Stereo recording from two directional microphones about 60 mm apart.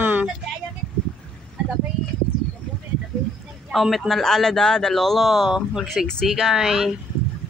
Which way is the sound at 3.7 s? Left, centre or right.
Centre.